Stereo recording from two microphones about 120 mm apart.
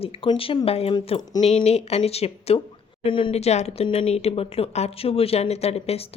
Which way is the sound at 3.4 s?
65° left (ahead or behind).